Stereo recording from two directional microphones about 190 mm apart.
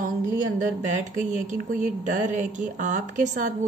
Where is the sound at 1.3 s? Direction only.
40° right (ahead or behind).